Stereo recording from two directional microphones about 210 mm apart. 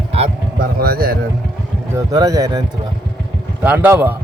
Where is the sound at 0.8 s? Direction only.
45° right (ahead or behind).